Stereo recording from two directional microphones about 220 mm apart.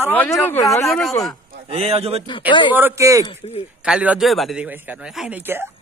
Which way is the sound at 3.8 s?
5° right (ahead or behind).